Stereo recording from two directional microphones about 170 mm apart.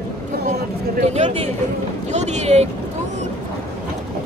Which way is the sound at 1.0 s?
45° right (ahead or behind).